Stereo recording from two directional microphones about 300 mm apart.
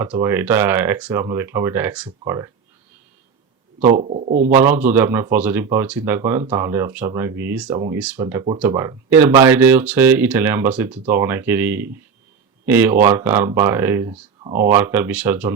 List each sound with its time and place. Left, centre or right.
0.0 s speech: centre
3.8 s speech: right
4.9 s speech: centre